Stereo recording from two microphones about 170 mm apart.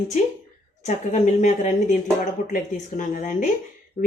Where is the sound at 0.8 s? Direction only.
45° left (ahead or behind).